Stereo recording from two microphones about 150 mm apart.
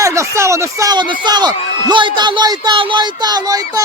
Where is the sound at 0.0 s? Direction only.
20° right (ahead or behind).